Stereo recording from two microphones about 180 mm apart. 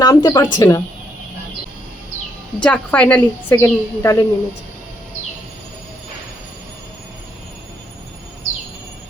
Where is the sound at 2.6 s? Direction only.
5° left (ahead or behind).